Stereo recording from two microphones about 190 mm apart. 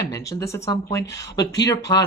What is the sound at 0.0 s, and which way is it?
Speech, 15° left (ahead or behind).